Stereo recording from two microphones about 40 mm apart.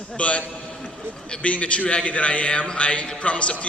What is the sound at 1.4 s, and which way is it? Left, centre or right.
A man's voice, left.